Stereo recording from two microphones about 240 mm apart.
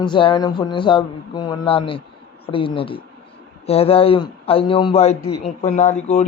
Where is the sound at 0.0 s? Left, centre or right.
Centre.